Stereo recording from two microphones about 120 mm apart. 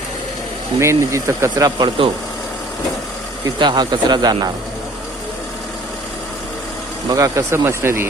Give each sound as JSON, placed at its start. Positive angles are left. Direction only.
{"t": 0.8, "sound": "speech", "side_deg": -25}
{"t": 2.0, "sound": "speech", "side_deg": -45}
{"t": 3.6, "sound": "speech", "side_deg": -35}
{"t": 7.1, "sound": "speech", "side_deg": -25}